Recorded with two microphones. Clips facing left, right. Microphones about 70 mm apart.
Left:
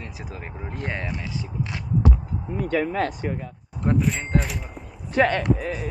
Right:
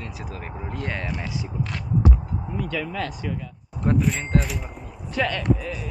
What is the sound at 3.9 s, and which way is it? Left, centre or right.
Speech, centre.